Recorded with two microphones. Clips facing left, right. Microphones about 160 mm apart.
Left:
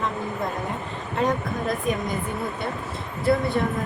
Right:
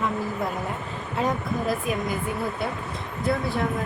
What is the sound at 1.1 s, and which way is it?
Speech, 5° right (ahead or behind).